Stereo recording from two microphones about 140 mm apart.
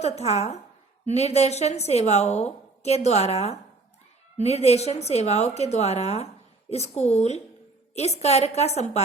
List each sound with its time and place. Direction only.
0.0 s a woman's voice: 50° left (ahead or behind)